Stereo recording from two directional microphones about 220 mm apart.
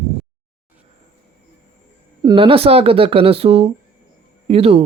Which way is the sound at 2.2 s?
20° right (ahead or behind).